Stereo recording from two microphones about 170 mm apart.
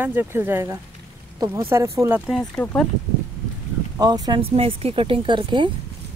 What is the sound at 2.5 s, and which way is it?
Speech, 10° left (ahead or behind).